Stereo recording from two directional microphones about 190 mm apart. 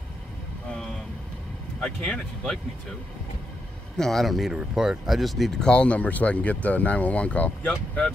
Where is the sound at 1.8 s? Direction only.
5° left (ahead or behind).